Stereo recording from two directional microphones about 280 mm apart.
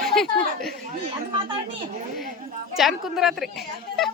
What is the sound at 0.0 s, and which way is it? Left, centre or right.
Speech, centre.